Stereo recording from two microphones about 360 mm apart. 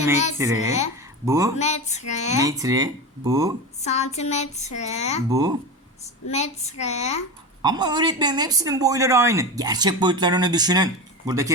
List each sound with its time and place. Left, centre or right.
0.3 s speech: centre
1.5 s female singing: centre
2.4 s speech: centre
3.8 s speech: centre
5.3 s speech: centre
6.3 s speech: centre
7.6 s speech: centre